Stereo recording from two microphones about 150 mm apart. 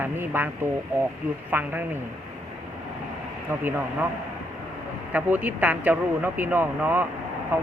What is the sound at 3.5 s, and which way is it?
Speech, 15° right (ahead or behind).